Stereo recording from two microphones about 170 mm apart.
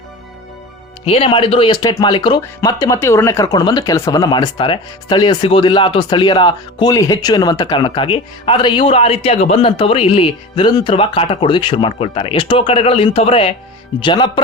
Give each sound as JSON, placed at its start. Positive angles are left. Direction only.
{"t": 1.0, "sound": "speech", "side_deg": 35}